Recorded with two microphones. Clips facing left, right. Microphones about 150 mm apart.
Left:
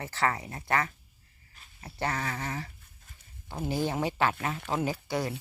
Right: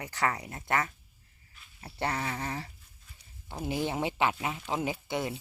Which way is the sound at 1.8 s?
30° right (ahead or behind).